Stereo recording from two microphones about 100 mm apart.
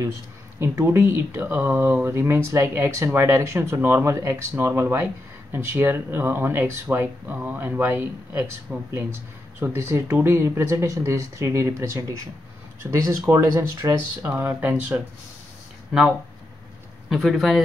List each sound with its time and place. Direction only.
0.6 s speech: 25° right (ahead or behind)
14.2 s speech: 20° right (ahead or behind)
17.1 s a man's voice: centre (ahead or behind)